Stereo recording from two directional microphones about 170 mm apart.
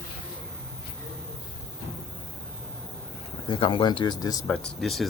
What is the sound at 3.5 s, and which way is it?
Speech, 30° left (ahead or behind).